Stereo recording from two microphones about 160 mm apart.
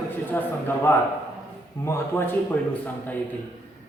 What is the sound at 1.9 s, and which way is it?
Speech, 15° left (ahead or behind).